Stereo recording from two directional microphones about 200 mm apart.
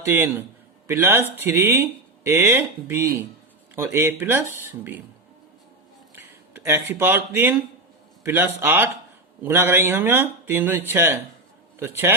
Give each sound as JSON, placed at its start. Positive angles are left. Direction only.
{"t": 0.0, "sound": "speech", "side_deg": -10}
{"t": 6.1, "sound": "speech", "side_deg": -10}